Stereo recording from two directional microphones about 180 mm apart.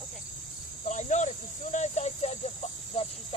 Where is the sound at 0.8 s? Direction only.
40° left (ahead or behind).